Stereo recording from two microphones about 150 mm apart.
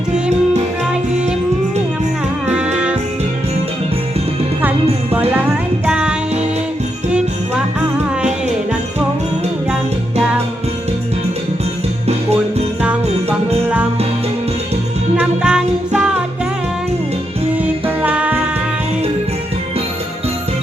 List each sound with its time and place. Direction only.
0.1 s music: 50° right (ahead or behind)
5.3 s music: 10° right (ahead or behind)
15.1 s music: 5° right (ahead or behind)
17.6 s music: 10° right (ahead or behind)